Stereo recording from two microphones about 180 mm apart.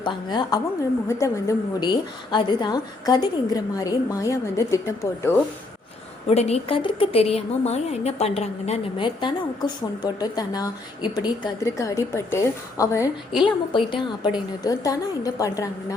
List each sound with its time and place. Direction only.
0.0 s a woman's voice: 25° left (ahead or behind)
6.2 s a woman's voice: 35° left (ahead or behind); by 16.0 s 20° left (ahead or behind)